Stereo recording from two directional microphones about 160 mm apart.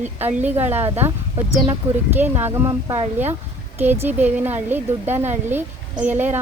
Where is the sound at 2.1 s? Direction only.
15° right (ahead or behind).